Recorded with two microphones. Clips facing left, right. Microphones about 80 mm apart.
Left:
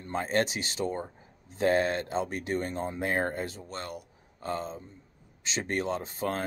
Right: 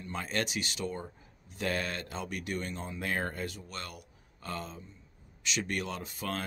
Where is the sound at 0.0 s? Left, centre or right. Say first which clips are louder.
Left 6 dB; left.